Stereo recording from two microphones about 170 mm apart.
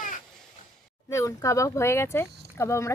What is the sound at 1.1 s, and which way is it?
Speech, 20° left (ahead or behind).